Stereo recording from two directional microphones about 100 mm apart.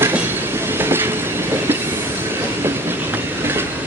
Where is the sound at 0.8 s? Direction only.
20° right (ahead or behind).